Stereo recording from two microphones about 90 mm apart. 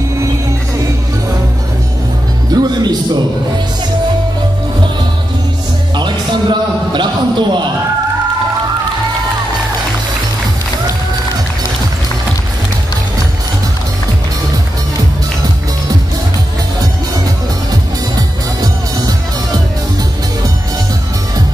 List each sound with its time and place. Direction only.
2.5 s music: 50° right (ahead or behind)
5.9 s a sound: 55° right (ahead or behind)
18.1 s music: 45° right (ahead or behind)